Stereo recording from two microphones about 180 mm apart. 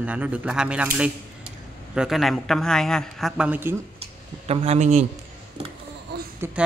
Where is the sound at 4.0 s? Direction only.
35° right (ahead or behind).